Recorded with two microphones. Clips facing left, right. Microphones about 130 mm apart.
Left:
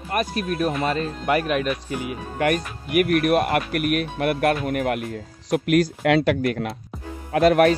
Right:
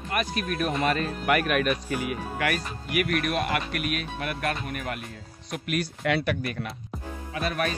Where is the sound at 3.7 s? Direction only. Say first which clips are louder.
Left 8 dB; 60° left (ahead or behind); by 6.6 s 90° left.